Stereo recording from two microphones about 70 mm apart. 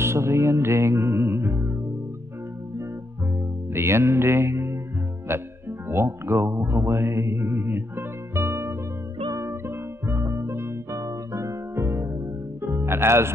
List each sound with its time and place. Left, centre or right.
0.0 s music: right
3.7 s music: right
11.0 s music: right